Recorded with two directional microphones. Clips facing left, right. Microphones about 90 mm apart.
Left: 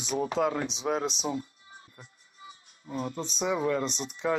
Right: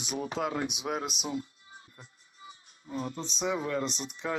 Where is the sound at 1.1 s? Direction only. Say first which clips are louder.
Left 3 dB; 30° left (ahead or behind).